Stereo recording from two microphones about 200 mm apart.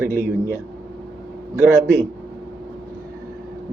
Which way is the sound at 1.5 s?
15° right (ahead or behind).